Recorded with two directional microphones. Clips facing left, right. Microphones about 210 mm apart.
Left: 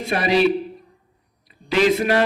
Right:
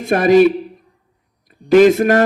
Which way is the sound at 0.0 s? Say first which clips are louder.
Right 8 dB; 50° right (ahead or behind).